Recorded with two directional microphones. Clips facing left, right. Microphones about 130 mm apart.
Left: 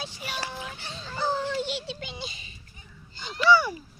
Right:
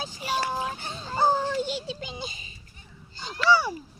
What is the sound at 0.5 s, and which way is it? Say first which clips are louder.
Fowl: right 7 dB; 40° right (ahead or behind).